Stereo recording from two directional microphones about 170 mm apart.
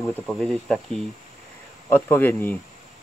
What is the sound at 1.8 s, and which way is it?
Speech, 10° left (ahead or behind).